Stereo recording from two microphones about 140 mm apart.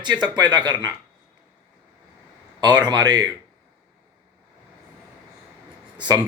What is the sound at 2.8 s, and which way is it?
Speech, 30° right (ahead or behind).